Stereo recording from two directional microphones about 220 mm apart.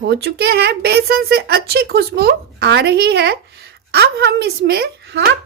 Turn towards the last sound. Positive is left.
turn(degrees=-50)  # may be behind; listen again after turning